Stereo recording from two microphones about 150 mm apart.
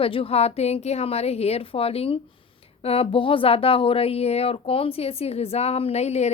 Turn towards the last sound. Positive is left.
turn(degrees=45)  # may be behind; listen again after turning